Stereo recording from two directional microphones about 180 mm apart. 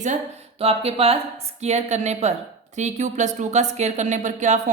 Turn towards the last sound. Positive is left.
turn(degrees=-40)  # may be behind; listen again after turning